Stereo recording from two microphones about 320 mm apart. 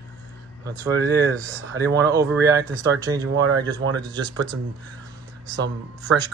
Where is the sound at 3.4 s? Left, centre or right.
Right.